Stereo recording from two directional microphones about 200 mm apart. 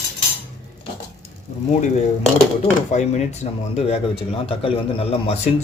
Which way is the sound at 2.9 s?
35° left (ahead or behind).